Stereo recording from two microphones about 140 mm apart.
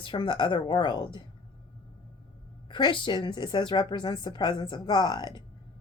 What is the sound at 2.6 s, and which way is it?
A woman's voice, 35° left (ahead or behind).